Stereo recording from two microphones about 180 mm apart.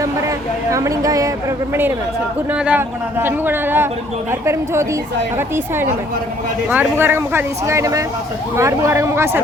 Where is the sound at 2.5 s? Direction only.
5° right (ahead or behind).